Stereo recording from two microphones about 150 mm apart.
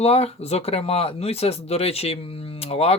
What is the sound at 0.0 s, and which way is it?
Speech, 45° left (ahead or behind).